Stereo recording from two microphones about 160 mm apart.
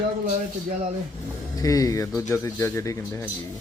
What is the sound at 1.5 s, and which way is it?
Speech, 20° left (ahead or behind).